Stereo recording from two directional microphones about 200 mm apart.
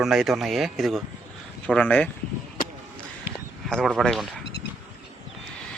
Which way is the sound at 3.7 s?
5° right (ahead or behind).